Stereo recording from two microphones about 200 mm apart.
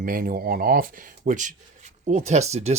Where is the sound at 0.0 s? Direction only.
45° right (ahead or behind).